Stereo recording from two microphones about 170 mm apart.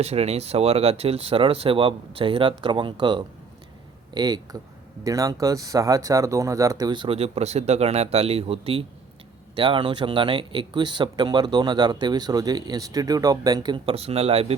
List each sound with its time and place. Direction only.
0.0 s speech: 40° right (ahead or behind)